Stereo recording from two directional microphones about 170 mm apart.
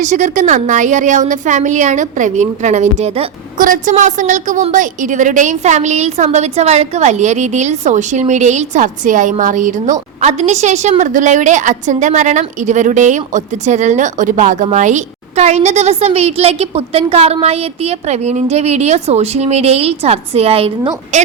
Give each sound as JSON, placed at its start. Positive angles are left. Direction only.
{"t": 0.0, "sound": "a woman's voice", "side_deg": -45}